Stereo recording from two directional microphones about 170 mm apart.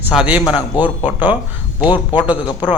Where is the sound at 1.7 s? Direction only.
25° left (ahead or behind).